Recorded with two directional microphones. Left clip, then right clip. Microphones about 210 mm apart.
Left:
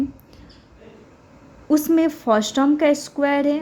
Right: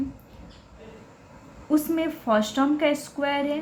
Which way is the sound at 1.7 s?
40° left (ahead or behind).